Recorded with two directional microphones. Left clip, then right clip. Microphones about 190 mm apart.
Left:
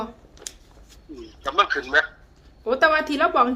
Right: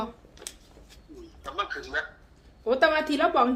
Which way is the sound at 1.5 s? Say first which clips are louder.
Left 11 dB; 60° left (ahead or behind).